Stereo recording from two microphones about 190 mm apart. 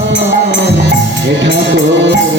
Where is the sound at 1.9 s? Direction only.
70° right (ahead or behind).